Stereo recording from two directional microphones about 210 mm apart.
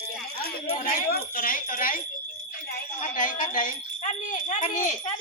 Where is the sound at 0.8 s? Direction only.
40° left (ahead or behind).